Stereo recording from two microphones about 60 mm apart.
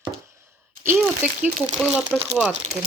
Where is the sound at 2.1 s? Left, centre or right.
Centre.